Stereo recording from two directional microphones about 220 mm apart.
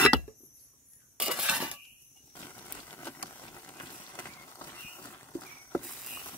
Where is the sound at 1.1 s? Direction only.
5° right (ahead or behind).